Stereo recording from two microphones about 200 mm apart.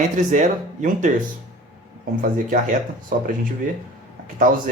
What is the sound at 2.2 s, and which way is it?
Speech, 40° right (ahead or behind).